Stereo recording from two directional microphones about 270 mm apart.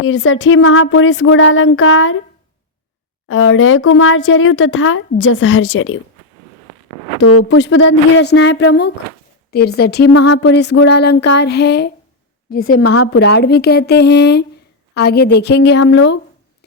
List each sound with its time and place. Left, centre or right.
0.0 s speech: left
3.2 s speech: left
7.2 s speech: left
7.6 s a sound: left